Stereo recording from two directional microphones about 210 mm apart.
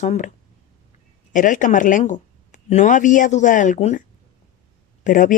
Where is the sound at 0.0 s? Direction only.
35° left (ahead or behind).